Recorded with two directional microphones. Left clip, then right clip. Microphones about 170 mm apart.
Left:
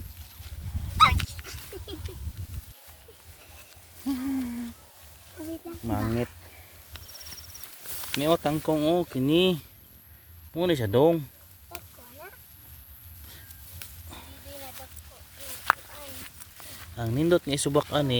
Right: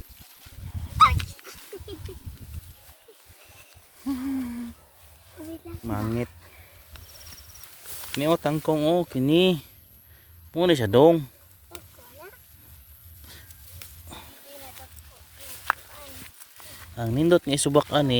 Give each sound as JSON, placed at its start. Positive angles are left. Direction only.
{"t": 0.9, "sound": "dog", "side_deg": 65}
{"t": 4.0, "sound": "a sound", "side_deg": -25}
{"t": 5.4, "sound": "a sound", "side_deg": 10}
{"t": 5.8, "sound": "speech", "side_deg": -25}
{"t": 6.9, "sound": "horse", "side_deg": 65}
{"t": 8.2, "sound": "speech", "side_deg": -45}
{"t": 10.5, "sound": "speech", "side_deg": -60}
{"t": 15.4, "sound": "a sound", "side_deg": 30}
{"t": 16.9, "sound": "speech", "side_deg": -35}